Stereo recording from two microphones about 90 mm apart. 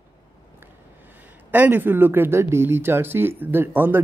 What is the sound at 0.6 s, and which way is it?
Speech, 20° right (ahead or behind).